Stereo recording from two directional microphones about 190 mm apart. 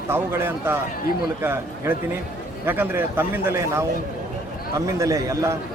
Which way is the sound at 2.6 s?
10° right (ahead or behind).